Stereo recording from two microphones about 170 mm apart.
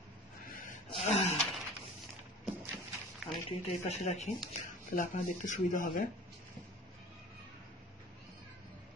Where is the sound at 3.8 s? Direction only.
40° left (ahead or behind).